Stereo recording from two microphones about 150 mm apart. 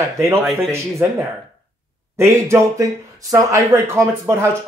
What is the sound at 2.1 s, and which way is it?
Speech, 20° right (ahead or behind).